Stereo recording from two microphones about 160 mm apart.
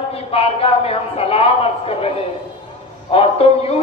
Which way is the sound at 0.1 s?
40° left (ahead or behind).